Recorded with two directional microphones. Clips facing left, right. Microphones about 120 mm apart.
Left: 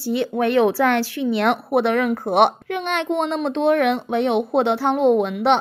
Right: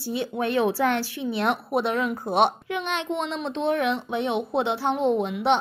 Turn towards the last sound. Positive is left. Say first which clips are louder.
# left 5 dB
turn(degrees=65)  # may be behind; listen again after turning